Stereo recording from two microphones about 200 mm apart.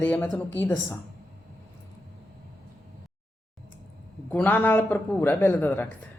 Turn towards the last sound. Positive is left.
turn(degrees=10)  # may be behind; listen again after turning